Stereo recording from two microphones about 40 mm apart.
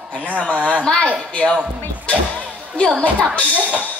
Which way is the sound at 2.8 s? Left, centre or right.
Left.